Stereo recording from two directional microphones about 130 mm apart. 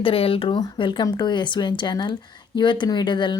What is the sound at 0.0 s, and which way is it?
Speech, 45° left (ahead or behind).